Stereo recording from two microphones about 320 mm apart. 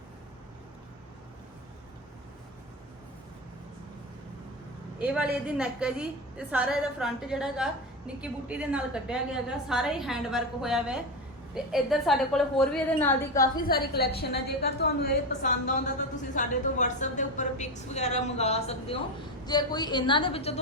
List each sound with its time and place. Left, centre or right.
4.9 s a woman's voice: centre
13.6 s a woman's voice: left